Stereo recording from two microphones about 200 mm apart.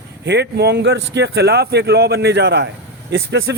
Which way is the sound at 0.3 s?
55° right (ahead or behind).